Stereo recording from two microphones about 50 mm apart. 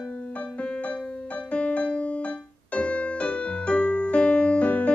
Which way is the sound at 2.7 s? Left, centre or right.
Left.